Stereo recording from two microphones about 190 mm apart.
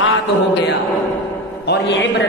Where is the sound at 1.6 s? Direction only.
65° left (ahead or behind).